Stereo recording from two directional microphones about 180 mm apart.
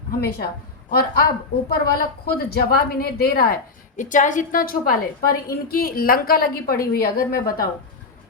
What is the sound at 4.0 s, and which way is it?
A woman's voice, 45° left (ahead or behind).